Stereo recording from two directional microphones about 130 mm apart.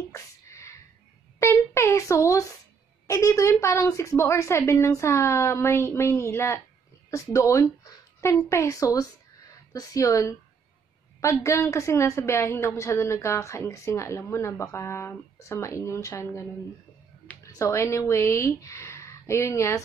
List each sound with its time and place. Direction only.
0.1 s a sound: 20° left (ahead or behind)
3.1 s a woman's voice: 25° left (ahead or behind)
17.5 s speech: 25° left (ahead or behind)